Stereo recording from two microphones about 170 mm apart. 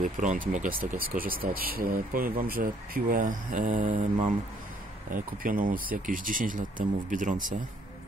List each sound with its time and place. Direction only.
0.0 s speech: 50° right (ahead or behind)
5.1 s speech: 55° right (ahead or behind)